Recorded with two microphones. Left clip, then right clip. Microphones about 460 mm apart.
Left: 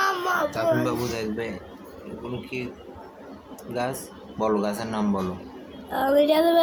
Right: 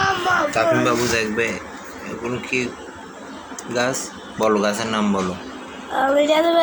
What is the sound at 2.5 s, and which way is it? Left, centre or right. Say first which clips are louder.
Speech: right 11 dB; left.